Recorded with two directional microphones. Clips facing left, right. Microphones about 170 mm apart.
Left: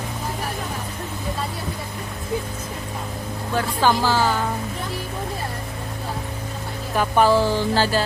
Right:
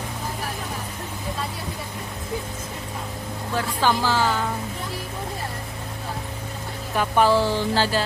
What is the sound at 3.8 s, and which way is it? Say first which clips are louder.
Speech: left 2 dB; 40° left (ahead or behind).